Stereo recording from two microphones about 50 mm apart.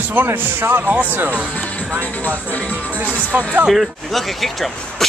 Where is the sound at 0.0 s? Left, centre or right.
Right.